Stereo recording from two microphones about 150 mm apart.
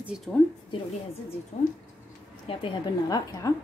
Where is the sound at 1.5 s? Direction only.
45° left (ahead or behind).